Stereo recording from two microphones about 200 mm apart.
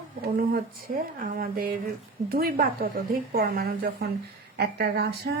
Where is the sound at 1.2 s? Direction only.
45° right (ahead or behind).